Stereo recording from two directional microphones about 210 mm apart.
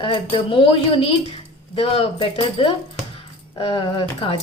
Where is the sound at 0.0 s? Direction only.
25° left (ahead or behind).